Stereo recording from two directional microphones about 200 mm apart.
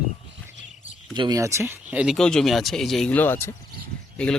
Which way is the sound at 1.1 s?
20° right (ahead or behind).